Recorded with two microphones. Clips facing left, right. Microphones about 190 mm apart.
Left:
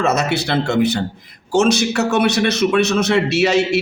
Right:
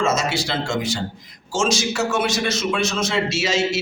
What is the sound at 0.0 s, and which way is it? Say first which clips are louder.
A man's voice: left 3 dB; 60° left (ahead or behind).